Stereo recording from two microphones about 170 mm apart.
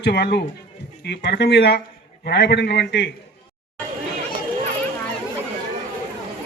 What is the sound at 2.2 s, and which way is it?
Speech, 85° left.